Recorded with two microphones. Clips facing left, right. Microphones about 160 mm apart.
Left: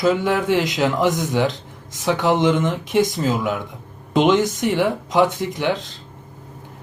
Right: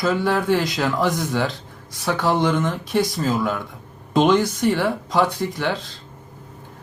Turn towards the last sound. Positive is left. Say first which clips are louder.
# left 2 dB
turn(degrees=20)  # may be behind; listen again after turning